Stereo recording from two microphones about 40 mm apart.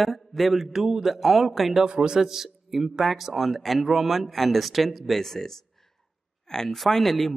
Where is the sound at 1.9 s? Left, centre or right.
Centre.